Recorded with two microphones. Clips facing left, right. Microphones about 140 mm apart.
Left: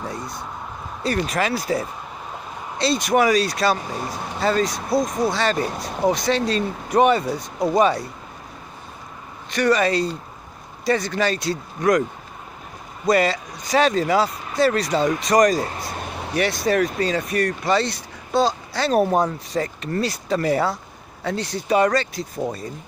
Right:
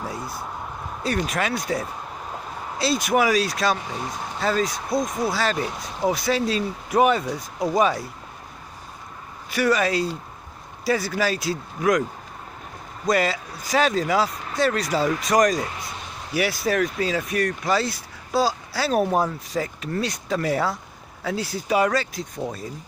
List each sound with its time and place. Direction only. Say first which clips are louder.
0.0 s a sound: left 1 dB; 5° right (ahead or behind)
1.0 s speech: left 3 dB; centre (ahead or behind)
9.5 s speech: left 2 dB; 5° right (ahead or behind)
13.0 s speech: left 3 dB; centre (ahead or behind)
15.9 s a sound: left 6 dB; 60° left (ahead or behind)
16.3 s speech: left 2 dB; 5° right (ahead or behind)